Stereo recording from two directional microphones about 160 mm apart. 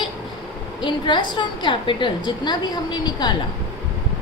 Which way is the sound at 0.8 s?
30° left (ahead or behind).